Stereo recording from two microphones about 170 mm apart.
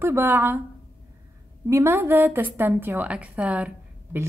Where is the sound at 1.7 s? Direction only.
15° right (ahead or behind).